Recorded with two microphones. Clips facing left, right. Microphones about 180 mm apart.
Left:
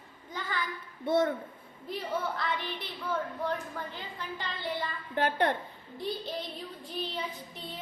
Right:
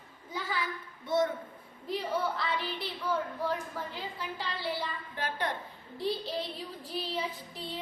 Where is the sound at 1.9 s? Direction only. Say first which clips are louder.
Right 2 dB; centre (ahead or behind).